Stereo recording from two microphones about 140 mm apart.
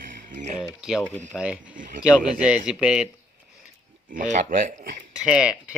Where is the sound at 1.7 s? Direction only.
70° right (ahead or behind).